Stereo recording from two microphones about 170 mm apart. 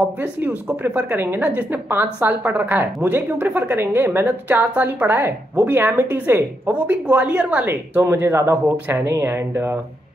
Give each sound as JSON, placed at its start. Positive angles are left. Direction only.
{"t": 0.2, "sound": "a woman's voice", "side_deg": -10}